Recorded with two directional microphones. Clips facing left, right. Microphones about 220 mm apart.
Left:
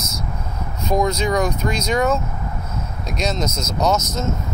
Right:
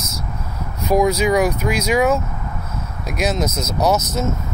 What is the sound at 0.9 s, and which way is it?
Speech, 5° right (ahead or behind).